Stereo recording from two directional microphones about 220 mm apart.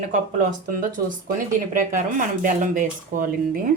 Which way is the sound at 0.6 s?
35° right (ahead or behind).